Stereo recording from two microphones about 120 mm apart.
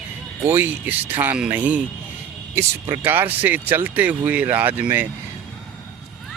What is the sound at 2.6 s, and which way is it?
Speech, 20° right (ahead or behind).